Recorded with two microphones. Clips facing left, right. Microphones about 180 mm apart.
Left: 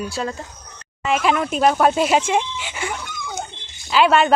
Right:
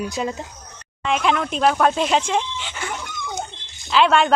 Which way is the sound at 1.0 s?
5° left (ahead or behind).